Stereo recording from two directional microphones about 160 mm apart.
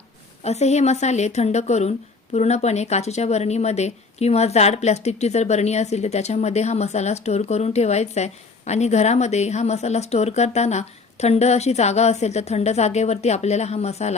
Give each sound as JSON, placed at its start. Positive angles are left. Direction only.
{"t": 0.4, "sound": "speech", "side_deg": 45}